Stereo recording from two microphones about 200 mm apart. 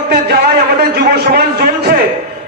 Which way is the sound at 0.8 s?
50° right (ahead or behind).